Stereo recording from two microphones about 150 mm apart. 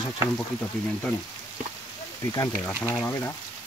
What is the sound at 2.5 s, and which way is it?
Speech, centre (ahead or behind).